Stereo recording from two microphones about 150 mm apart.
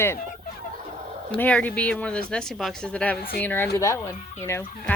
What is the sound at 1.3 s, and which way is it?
Speech, 10° left (ahead or behind).